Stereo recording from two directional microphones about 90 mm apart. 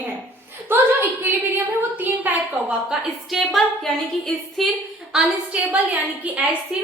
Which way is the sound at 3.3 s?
Centre (ahead or behind).